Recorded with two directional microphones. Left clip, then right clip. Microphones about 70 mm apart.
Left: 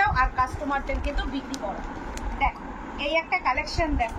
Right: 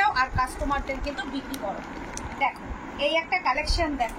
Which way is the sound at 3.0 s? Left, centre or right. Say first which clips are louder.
Right 1 dB; left.